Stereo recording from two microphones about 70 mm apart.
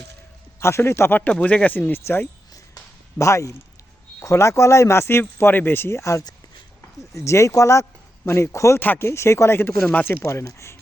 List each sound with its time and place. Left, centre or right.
0.6 s a man's voice: left
1.2 s speech: centre
3.2 s speech: left
8.8 s speech: left
9.0 s speech: left
9.9 s speech: left
10.2 s speech: left